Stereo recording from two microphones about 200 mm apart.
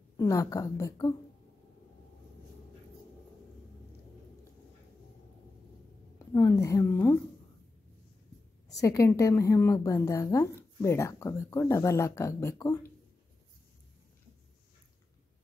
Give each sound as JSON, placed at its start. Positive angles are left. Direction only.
{"t": 0.2, "sound": "a woman's voice", "side_deg": 15}
{"t": 6.3, "sound": "a woman's voice", "side_deg": 15}
{"t": 8.8, "sound": "a woman's voice", "side_deg": 15}